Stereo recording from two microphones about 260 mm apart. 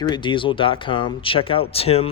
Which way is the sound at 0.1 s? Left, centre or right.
Centre.